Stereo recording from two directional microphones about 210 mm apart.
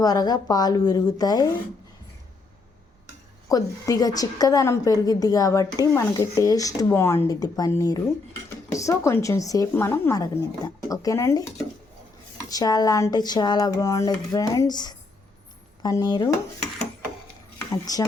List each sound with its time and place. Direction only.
0.0 s a woman's voice: 20° left (ahead or behind)
3.5 s a woman's voice: 15° left (ahead or behind)
8.7 s a woman's voice: 15° left (ahead or behind)
17.7 s a woman's voice: 15° left (ahead or behind)